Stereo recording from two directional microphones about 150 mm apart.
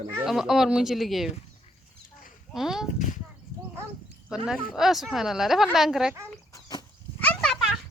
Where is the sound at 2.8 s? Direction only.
55° left (ahead or behind).